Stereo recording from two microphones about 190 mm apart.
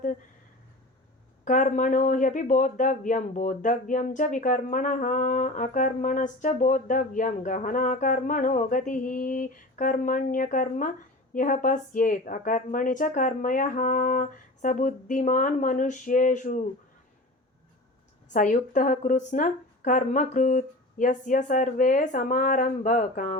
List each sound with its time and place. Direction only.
1.5 s speech: 40° left (ahead or behind)
18.3 s speech: 45° left (ahead or behind)